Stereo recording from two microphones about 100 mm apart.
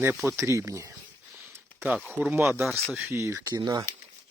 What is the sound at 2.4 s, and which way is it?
Speech, 5° right (ahead or behind).